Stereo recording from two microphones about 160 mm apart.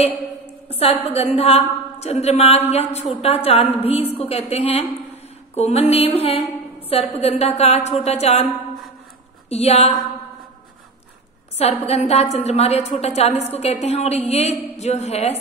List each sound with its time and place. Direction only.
0.7 s a woman's voice: 40° left (ahead or behind)
9.5 s a woman's voice: 40° left (ahead or behind)
11.5 s a woman's voice: 40° left (ahead or behind)